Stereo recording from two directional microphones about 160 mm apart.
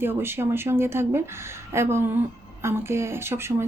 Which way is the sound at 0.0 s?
15° right (ahead or behind).